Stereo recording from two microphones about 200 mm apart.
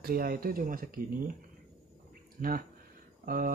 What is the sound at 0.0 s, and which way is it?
Speech, 50° right (ahead or behind).